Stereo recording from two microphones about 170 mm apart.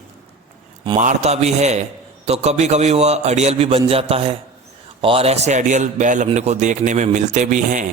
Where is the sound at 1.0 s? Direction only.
45° right (ahead or behind).